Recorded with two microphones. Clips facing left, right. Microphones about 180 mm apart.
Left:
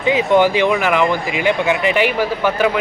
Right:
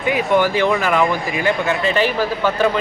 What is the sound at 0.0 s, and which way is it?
A man's voice, 20° left (ahead or behind).